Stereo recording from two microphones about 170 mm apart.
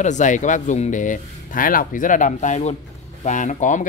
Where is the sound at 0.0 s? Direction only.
45° left (ahead or behind).